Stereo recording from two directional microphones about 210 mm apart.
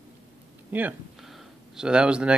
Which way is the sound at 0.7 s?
10° right (ahead or behind).